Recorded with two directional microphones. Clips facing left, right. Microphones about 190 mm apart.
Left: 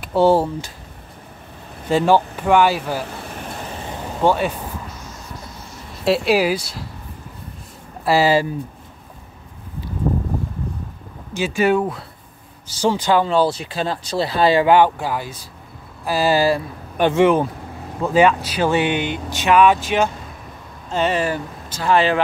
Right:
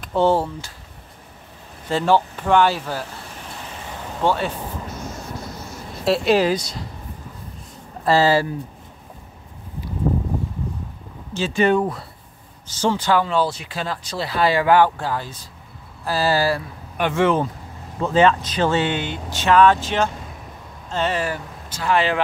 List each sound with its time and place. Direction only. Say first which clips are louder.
0.0 s speech: left 3 dB; 10° left (ahead or behind)
1.9 s speech: left 3 dB; 15° left (ahead or behind)
4.2 s speech: left 3 dB; 15° left (ahead or behind)
6.0 s speech: even; 5° left (ahead or behind)
8.0 s speech: left 1 dB; 10° left (ahead or behind)
11.3 s speech: left 1 dB; 10° left (ahead or behind)
13.2 s speech: left 4 dB; 30° left (ahead or behind)